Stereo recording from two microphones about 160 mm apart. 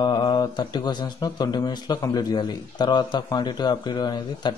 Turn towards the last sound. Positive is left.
turn(degrees=30)  # may be behind; listen again after turning